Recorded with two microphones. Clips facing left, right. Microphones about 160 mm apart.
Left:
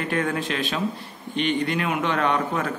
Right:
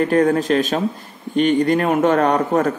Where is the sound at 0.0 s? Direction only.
40° right (ahead or behind).